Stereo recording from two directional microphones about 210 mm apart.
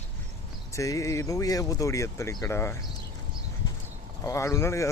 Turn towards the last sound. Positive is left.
turn(degrees=15)  # may be behind; listen again after turning